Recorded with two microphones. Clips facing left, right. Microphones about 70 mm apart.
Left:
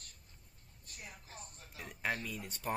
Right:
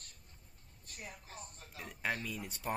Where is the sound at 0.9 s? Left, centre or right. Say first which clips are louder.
Right 3 dB; right.